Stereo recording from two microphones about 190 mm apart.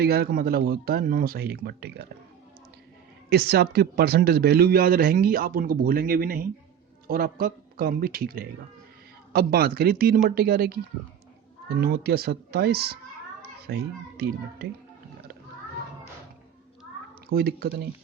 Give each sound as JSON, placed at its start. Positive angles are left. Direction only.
{"t": 0.0, "sound": "speech", "side_deg": -55}
{"t": 3.2, "sound": "speech", "side_deg": -55}
{"t": 11.8, "sound": "speech", "side_deg": -55}
{"t": 17.3, "sound": "speech", "side_deg": -55}